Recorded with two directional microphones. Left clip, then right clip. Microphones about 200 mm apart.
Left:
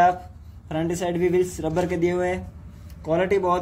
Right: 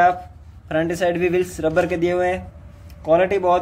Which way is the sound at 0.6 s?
15° right (ahead or behind).